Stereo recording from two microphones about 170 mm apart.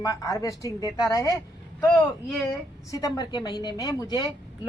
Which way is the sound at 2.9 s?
20° left (ahead or behind).